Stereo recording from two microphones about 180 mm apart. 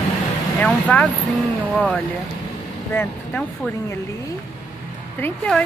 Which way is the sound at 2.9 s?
10° left (ahead or behind).